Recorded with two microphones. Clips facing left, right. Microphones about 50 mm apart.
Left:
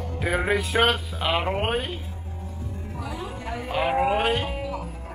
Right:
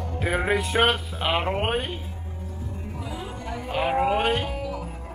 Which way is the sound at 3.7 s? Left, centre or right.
Centre.